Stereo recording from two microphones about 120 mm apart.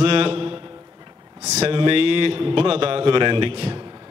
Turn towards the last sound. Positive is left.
turn(degrees=-50)  # may be behind; listen again after turning